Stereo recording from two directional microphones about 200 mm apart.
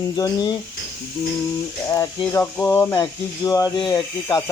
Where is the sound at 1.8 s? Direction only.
15° left (ahead or behind).